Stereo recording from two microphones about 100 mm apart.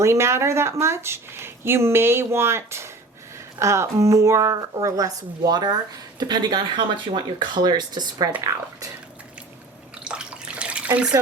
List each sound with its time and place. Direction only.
0.0 s speech: 30° right (ahead or behind); by 8.3 s 45° right (ahead or behind)
10.0 s water: 10° right (ahead or behind)